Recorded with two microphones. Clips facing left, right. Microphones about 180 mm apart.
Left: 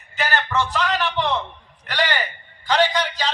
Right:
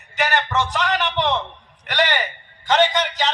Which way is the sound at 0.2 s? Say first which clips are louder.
Right 1 dB; 20° right (ahead or behind).